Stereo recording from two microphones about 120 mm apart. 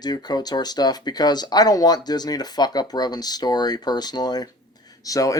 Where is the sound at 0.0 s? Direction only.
35° left (ahead or behind).